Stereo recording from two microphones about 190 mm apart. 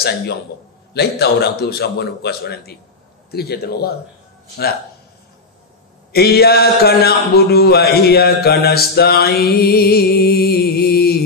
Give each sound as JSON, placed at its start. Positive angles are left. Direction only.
{"t": 0.9, "sound": "a man's voice", "side_deg": 55}
{"t": 6.1, "sound": "a man's voice", "side_deg": 55}